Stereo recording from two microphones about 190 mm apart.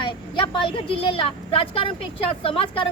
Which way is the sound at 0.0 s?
30° left (ahead or behind).